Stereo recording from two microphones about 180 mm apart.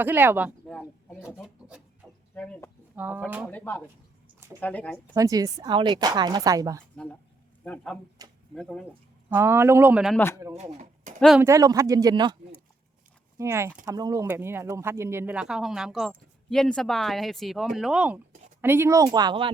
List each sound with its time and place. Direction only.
0.0 s speech: 10° right (ahead or behind)
0.7 s speech: 5° left (ahead or behind)
2.3 s speech: 10° left (ahead or behind)
2.9 s speech: 10° right (ahead or behind)
3.5 s speech: 10° left (ahead or behind)
5.1 s a woman's voice: 20° right (ahead or behind)
6.9 s speech: 5° left (ahead or behind)
8.2 s a sound: 20° right (ahead or behind)
8.5 s speech: centre (ahead or behind)
8.9 s speech: 15° right (ahead or behind)
10.2 s speech: 15° left (ahead or behind)
10.5 s speech: 40° right (ahead or behind)
11.3 s a woman's voice: 15° right (ahead or behind)
13.4 s a woman's voice: 15° right (ahead or behind)